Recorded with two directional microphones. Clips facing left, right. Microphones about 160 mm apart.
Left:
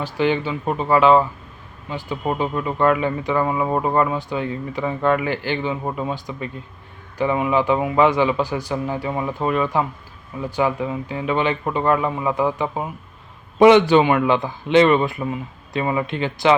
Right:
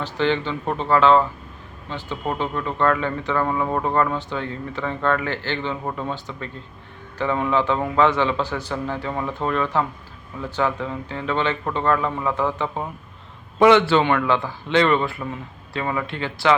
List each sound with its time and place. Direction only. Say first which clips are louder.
0.0 s speech: left 2 dB; 10° left (ahead or behind)